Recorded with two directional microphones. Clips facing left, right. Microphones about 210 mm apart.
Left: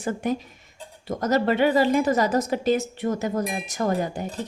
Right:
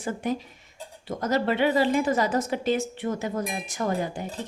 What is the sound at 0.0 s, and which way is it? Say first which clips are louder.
A woman's voice: left 3 dB; 45° left (ahead or behind).